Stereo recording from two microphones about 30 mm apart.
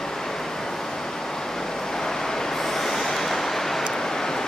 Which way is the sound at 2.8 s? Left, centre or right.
Centre.